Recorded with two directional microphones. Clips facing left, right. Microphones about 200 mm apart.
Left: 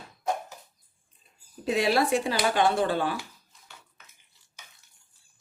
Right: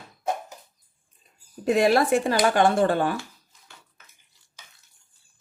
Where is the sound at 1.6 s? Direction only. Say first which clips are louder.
Right 5 dB; 50° right (ahead or behind).